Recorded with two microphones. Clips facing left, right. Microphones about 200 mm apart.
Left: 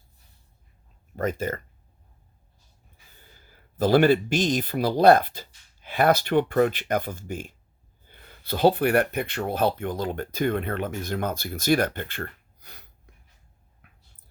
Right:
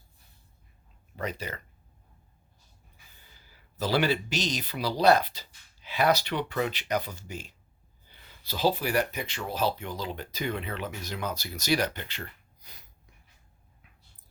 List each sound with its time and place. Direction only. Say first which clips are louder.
1.1 s speech: left 8 dB; 50° left (ahead or behind)
3.3 s speech: left 9 dB; 50° left (ahead or behind)